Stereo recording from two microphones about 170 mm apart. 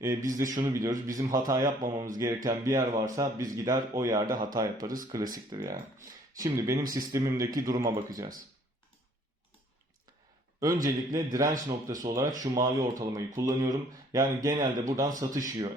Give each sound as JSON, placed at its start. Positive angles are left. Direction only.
{"t": 0.0, "sound": "speech", "side_deg": -20}
{"t": 4.9, "sound": "speech", "side_deg": -55}
{"t": 5.1, "sound": "speech", "side_deg": -20}
{"t": 10.8, "sound": "speech", "side_deg": -20}